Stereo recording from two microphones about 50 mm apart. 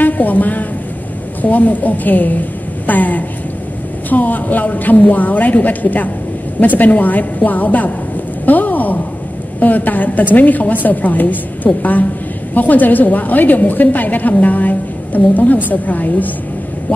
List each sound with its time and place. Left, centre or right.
0.0 s a woman's voice: left